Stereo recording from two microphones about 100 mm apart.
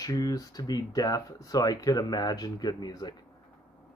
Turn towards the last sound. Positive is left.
turn(degrees=40)  # may be behind; listen again after turning